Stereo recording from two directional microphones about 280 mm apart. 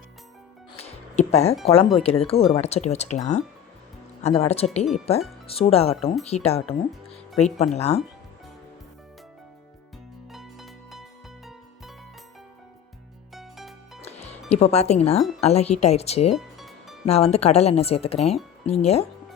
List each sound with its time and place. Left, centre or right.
0.7 s music: left
1.6 s speech: left
10.3 s music: centre
13.3 s music: centre
14.5 s speech: left
16.3 s music: centre
17.1 s speech: left